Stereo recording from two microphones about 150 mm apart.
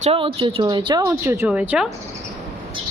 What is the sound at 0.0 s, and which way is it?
Speech, 40° right (ahead or behind).